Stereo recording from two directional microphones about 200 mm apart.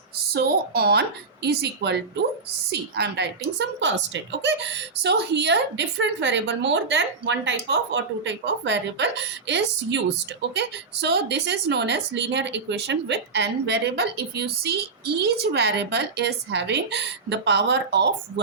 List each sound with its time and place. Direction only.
0.3 s speech: 50° right (ahead or behind)